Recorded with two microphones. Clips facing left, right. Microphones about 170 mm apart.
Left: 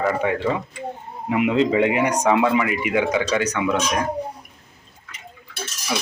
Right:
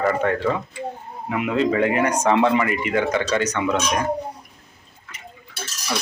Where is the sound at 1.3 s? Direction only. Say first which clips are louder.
Left 2 dB; 20° left (ahead or behind).